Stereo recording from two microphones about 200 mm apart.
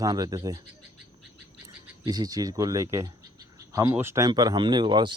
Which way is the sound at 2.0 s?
20° right (ahead or behind).